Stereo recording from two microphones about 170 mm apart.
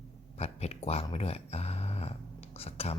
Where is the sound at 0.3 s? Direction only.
40° left (ahead or behind).